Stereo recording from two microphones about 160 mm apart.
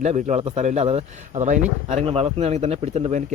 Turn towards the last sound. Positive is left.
turn(degrees=-40)  # may be behind; listen again after turning